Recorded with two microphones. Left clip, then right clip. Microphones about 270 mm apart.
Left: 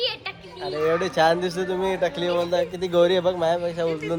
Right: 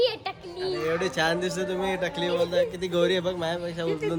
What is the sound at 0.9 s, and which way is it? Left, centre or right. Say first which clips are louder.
A man's voice: left 7 dB; centre.